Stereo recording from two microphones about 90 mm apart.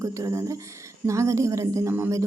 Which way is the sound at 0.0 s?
35° right (ahead or behind).